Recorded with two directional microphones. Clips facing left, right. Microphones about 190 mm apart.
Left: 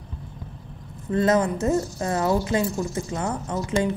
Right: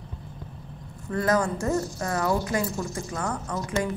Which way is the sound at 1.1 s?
25° left (ahead or behind).